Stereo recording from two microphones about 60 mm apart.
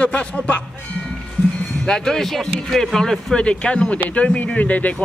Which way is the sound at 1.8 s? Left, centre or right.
Centre.